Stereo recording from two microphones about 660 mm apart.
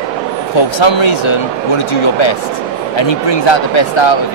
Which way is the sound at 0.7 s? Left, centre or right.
Left.